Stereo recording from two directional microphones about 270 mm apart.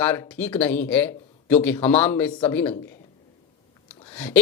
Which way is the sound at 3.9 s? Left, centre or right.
Centre.